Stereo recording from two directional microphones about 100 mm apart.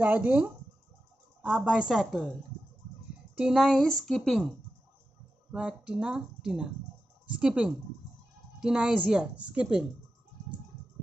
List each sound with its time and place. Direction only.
0.0 s speech: 15° right (ahead or behind)
3.3 s speech: 5° right (ahead or behind)
5.5 s speech: 10° right (ahead or behind)